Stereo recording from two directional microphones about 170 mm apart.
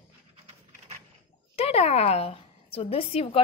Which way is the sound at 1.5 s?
35° left (ahead or behind).